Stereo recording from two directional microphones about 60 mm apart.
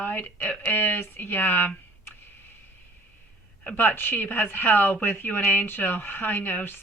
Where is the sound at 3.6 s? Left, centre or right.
Left.